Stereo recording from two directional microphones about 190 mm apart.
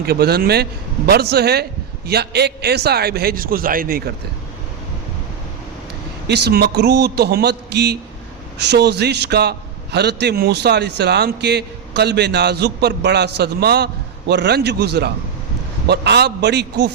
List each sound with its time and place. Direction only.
0.0 s a man's voice: 55° right (ahead or behind)
6.2 s a man's voice: 60° right (ahead or behind)